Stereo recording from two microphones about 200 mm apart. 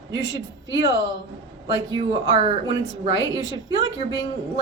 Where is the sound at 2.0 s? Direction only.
20° right (ahead or behind).